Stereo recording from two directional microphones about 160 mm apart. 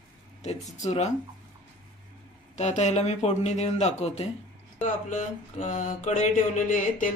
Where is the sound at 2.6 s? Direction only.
45° left (ahead or behind).